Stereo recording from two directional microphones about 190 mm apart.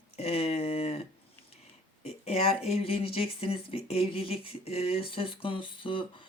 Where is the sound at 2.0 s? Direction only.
35° left (ahead or behind).